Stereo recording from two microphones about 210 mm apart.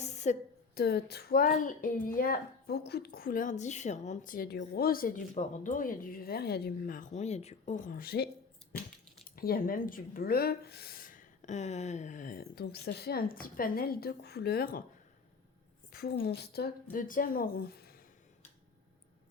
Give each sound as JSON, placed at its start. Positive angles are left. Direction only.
{"t": 0.0, "sound": "a sound", "side_deg": 35}
{"t": 0.7, "sound": "a woman's voice", "side_deg": 50}
{"t": 15.9, "sound": "a woman's voice", "side_deg": 45}